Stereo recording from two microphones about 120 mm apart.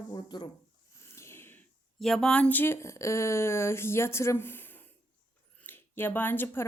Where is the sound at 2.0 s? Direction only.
5° left (ahead or behind).